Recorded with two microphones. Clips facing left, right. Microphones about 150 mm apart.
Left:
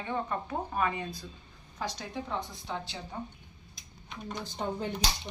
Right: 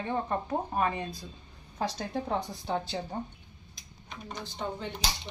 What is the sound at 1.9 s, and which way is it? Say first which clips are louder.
Speech: right 5 dB; 55° right (ahead or behind).